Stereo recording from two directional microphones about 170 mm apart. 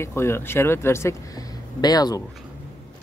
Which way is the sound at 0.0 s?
15° left (ahead or behind).